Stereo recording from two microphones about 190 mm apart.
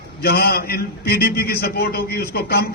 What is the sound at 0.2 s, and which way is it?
A man's voice, 55° left (ahead or behind).